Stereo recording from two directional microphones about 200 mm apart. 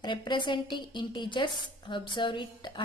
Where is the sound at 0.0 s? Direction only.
25° left (ahead or behind).